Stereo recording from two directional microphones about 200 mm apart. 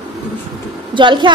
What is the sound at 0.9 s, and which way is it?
Speech, 25° right (ahead or behind).